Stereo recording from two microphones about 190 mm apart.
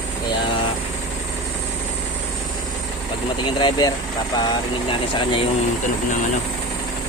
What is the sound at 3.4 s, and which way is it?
Speech, 25° left (ahead or behind).